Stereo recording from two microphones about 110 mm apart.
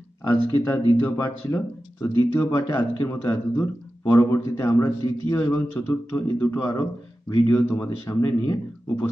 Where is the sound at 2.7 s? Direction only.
20° left (ahead or behind); by 9.0 s 40° left (ahead or behind).